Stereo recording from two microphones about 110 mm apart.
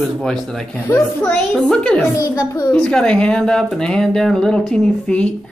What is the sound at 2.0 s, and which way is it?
Speech, 30° left (ahead or behind).